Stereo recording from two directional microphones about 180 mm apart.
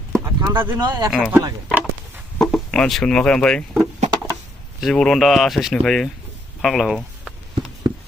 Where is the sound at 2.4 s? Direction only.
5° left (ahead or behind).